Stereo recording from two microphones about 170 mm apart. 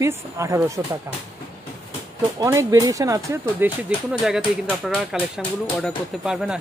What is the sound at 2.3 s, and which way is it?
Speech, 20° right (ahead or behind).